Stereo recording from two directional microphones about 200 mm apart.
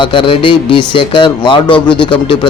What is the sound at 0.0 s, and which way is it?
Speech, 25° left (ahead or behind).